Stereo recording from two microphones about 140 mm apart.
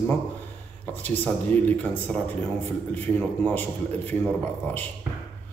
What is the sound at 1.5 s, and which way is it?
A man's voice, 10° left (ahead or behind).